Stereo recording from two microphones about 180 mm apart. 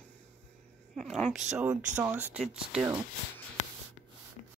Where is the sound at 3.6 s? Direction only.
40° left (ahead or behind).